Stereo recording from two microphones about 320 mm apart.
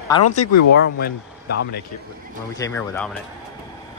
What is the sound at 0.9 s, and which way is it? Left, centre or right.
Speech, left.